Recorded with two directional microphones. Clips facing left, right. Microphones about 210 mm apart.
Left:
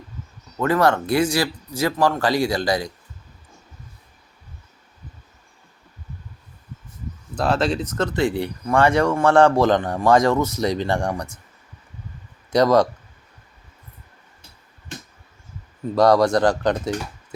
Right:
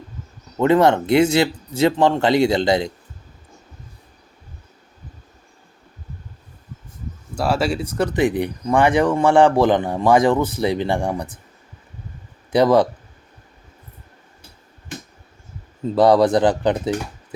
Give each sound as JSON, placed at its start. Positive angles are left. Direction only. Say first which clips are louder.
{"t": 0.5, "sound": "speech", "louder": "right 4 dB", "side_deg": -20}
{"t": 7.3, "sound": "speech", "louder": "even", "side_deg": -10}
{"t": 12.5, "sound": "speech", "louder": "right 1 dB", "side_deg": -15}
{"t": 15.8, "sound": "speech", "louder": "right 2 dB", "side_deg": -20}